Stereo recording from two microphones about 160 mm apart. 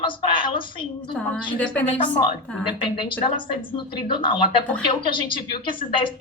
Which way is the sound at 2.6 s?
30° left (ahead or behind).